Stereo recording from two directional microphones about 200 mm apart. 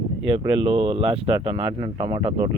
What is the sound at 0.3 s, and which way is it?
Speech, 25° right (ahead or behind).